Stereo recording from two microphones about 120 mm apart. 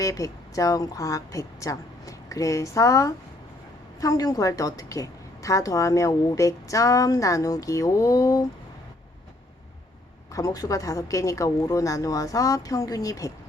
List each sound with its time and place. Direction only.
0.0 s a woman's voice: 30° left (ahead or behind)
10.3 s a woman's voice: 30° left (ahead or behind)